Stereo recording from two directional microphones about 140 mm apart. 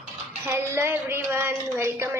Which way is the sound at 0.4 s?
15° right (ahead or behind).